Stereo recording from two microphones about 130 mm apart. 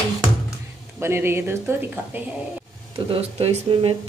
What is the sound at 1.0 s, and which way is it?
Speech, 20° right (ahead or behind).